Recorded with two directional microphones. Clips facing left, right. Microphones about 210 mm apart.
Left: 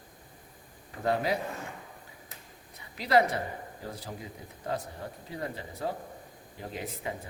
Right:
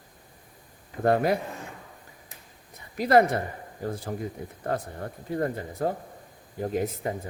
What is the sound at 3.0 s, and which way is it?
Speech, 50° right (ahead or behind).